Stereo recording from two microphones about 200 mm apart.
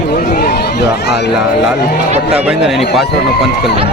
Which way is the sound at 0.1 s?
55° left (ahead or behind).